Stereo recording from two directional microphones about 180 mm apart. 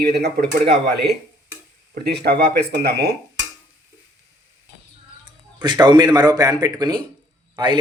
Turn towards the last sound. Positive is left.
turn(degrees=-25)  # may be behind; listen again after turning